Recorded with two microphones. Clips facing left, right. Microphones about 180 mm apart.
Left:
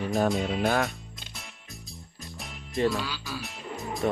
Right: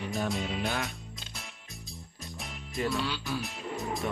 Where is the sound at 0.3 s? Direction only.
Centre (ahead or behind).